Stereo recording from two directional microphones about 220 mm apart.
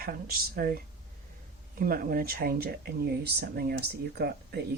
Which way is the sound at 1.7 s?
40° right (ahead or behind).